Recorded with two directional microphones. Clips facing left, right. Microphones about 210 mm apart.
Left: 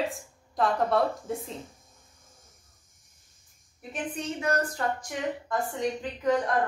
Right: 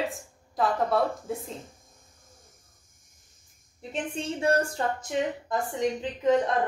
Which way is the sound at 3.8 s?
30° right (ahead or behind).